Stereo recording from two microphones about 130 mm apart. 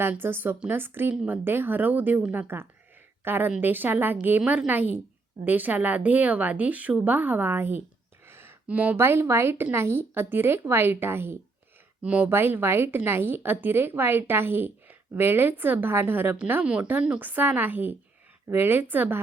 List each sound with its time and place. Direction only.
0.0 s a woman's voice: 15° right (ahead or behind)